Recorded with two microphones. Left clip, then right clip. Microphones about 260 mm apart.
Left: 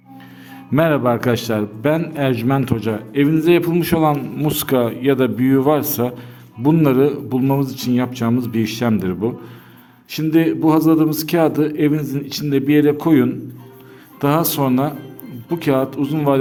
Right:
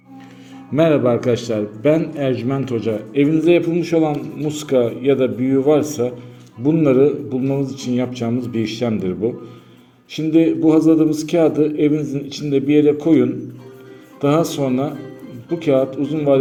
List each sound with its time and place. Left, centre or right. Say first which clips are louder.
0.7 s a man's voice: right 1 dB; left
14.2 s a man's voice: even; left